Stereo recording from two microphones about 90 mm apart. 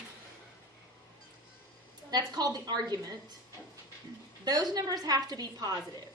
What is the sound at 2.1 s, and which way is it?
A woman's voice, 45° right (ahead or behind).